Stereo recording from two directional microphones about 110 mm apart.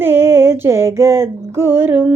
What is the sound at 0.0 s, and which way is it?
Music, 20° right (ahead or behind).